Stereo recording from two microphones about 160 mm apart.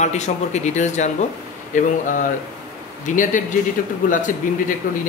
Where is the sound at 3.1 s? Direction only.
50° left (ahead or behind).